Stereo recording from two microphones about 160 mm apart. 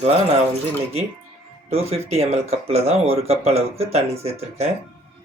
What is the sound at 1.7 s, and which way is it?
Speech, 40° right (ahead or behind).